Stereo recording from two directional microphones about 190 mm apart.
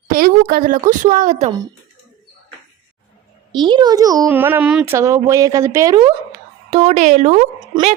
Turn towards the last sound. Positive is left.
turn(degrees=-40)  # may be behind; listen again after turning